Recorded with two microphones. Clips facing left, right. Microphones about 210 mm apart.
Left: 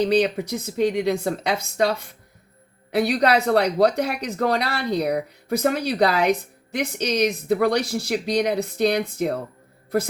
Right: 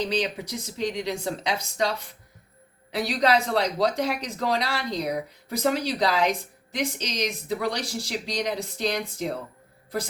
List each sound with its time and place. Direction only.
0.1 s speech: 55° left (ahead or behind)
2.9 s speech: 55° left (ahead or behind)